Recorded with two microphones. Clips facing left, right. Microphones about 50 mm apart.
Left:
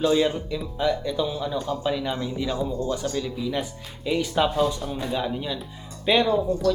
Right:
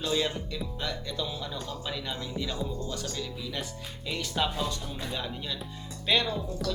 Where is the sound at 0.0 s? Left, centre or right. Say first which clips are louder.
Left 8 dB; centre.